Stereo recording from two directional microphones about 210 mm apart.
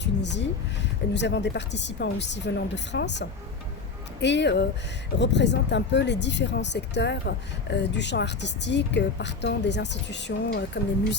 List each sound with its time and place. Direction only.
0.0 s speech: 55° left (ahead or behind)